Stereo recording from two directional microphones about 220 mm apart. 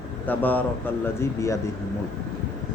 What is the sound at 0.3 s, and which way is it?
A man's voice, 10° left (ahead or behind).